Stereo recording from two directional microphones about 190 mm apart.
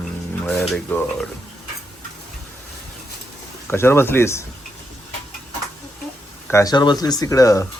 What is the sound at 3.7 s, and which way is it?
Speech, 15° left (ahead or behind).